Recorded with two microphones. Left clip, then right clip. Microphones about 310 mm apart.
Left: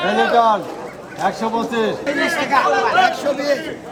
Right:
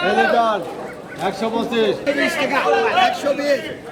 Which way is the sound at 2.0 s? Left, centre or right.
Left.